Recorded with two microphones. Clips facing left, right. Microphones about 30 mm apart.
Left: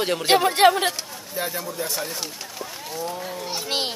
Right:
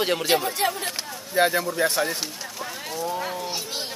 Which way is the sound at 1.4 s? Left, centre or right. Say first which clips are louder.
Right 8 dB; right.